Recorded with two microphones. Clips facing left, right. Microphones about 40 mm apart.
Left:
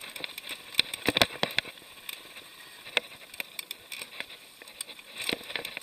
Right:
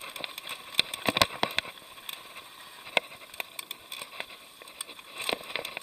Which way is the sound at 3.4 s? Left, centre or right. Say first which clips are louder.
Even; right.